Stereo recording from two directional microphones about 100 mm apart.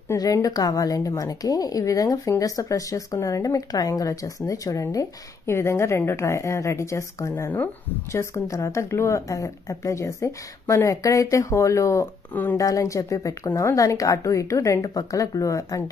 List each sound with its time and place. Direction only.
0.1 s a woman's voice: 35° left (ahead or behind)